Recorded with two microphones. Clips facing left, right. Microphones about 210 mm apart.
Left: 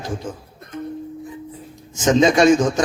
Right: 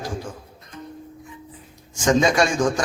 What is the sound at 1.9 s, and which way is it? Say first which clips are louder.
Speech: left 3 dB; 20° left (ahead or behind).